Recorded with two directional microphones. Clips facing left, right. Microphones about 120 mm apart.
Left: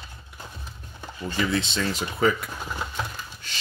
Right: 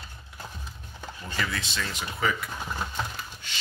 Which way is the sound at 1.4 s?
25° left (ahead or behind).